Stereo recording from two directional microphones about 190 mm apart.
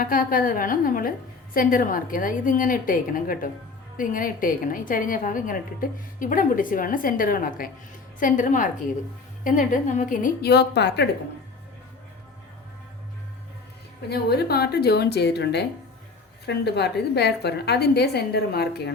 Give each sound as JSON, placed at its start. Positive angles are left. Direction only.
{"t": 0.0, "sound": "a woman's voice", "side_deg": 45}
{"t": 14.1, "sound": "a woman's voice", "side_deg": 55}